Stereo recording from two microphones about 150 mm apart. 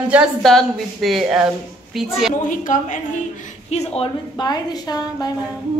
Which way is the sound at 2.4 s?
60° left (ahead or behind).